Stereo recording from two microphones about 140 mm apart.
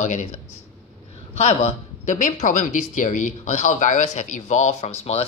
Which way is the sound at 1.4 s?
50° left (ahead or behind).